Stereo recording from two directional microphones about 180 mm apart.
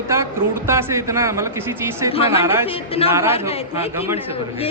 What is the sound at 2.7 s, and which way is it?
A woman's voice, 30° left (ahead or behind).